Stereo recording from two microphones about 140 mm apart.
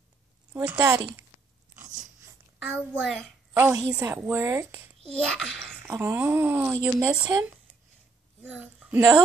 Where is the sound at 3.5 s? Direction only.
15° right (ahead or behind).